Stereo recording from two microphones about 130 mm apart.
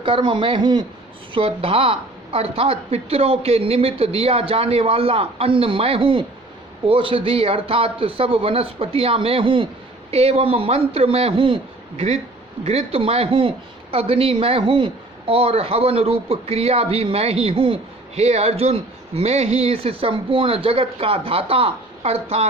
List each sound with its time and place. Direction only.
0.0 s speech: 40° right (ahead or behind)